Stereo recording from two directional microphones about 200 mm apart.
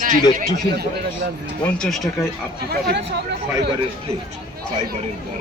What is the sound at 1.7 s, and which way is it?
Speech, centre (ahead or behind).